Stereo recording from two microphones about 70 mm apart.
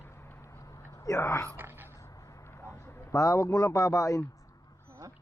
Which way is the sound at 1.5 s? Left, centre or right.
Right.